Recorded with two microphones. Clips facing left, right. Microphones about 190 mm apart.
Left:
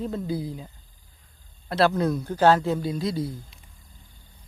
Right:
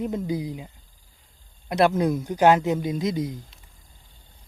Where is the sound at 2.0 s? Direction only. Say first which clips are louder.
Right 1 dB; 15° right (ahead or behind).